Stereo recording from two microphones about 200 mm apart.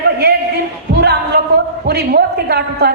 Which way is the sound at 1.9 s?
55° right (ahead or behind).